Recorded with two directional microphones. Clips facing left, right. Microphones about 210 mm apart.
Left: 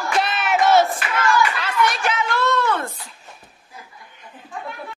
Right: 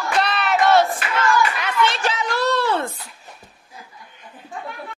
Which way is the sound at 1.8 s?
30° right (ahead or behind).